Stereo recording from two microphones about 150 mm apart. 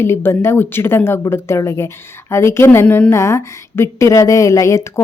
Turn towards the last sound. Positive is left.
turn(degrees=20)  # may be behind; listen again after turning